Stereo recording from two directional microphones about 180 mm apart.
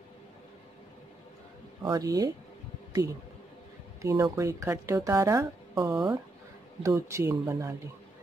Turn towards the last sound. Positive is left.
turn(degrees=-15)  # may be behind; listen again after turning